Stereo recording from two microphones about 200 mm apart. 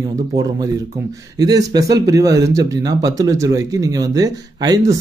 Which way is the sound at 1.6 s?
15° right (ahead or behind).